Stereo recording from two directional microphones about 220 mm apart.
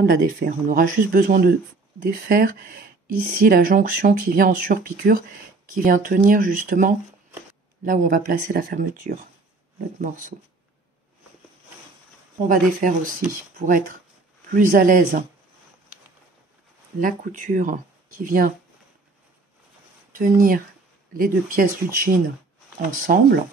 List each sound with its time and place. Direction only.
0.0 s speech: 45° right (ahead or behind)
13.6 s speech: 40° right (ahead or behind)
17.0 s speech: 35° right (ahead or behind)
20.2 s speech: 40° right (ahead or behind)